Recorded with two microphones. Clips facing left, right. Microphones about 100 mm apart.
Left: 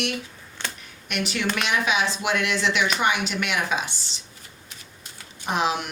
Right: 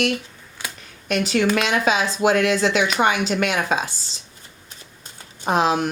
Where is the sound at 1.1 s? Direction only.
35° right (ahead or behind).